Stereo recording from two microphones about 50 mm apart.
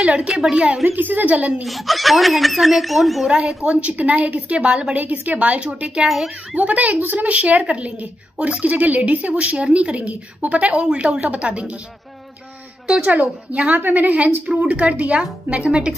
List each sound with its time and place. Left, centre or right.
0.0 s a woman's voice: right
0.8 s a woman's voice: right
1.6 s speech: centre
3.3 s a woman's voice: centre
12.8 s a woman's voice: centre
13.1 s a woman's voice: right